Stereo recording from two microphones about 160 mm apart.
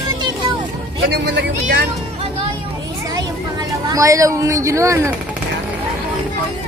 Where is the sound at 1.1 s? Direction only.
85° right.